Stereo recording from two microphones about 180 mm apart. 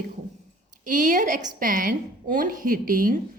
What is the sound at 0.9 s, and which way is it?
A woman's voice, 45° right (ahead or behind).